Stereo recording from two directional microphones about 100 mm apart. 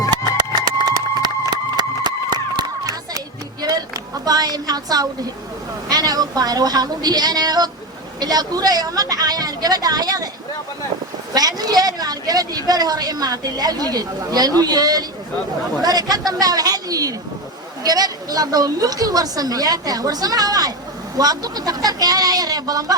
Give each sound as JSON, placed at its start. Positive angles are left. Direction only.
{"t": 0.9, "sound": "run", "side_deg": -40}
{"t": 4.3, "sound": "a woman's voice", "side_deg": -40}
{"t": 11.3, "sound": "a woman's voice", "side_deg": -40}